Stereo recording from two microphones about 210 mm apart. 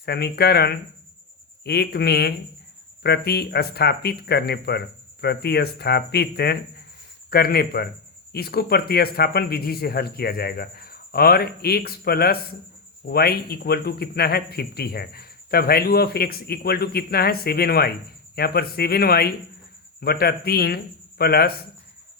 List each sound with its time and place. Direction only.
0.0 s speech: 50° left (ahead or behind)